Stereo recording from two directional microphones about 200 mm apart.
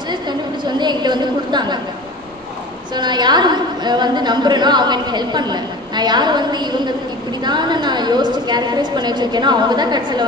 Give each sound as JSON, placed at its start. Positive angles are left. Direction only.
{"t": 0.1, "sound": "a woman's voice", "side_deg": -20}
{"t": 2.9, "sound": "a woman's voice", "side_deg": -20}